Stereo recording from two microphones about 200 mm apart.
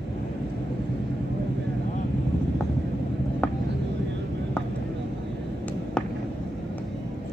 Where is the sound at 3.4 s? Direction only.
5° left (ahead or behind).